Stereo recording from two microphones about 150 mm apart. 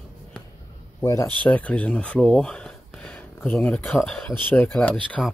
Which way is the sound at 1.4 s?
10° left (ahead or behind).